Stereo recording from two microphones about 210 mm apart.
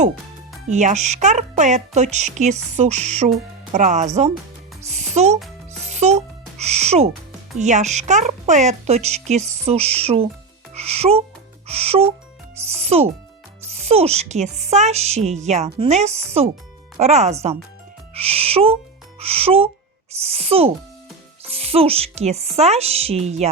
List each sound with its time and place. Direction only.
0.7 s speech: 35° right (ahead or behind)
5.8 s music: 30° right (ahead or behind)
6.6 s owl: 30° right (ahead or behind)
7.6 s speech: 35° right (ahead or behind)